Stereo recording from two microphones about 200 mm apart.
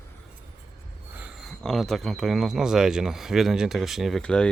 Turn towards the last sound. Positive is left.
turn(degrees=5)  # may be behind; listen again after turning